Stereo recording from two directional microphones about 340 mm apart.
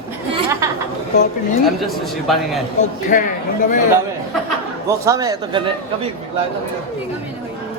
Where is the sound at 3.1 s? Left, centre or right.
Left.